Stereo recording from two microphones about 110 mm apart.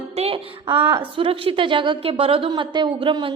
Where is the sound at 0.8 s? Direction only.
25° right (ahead or behind).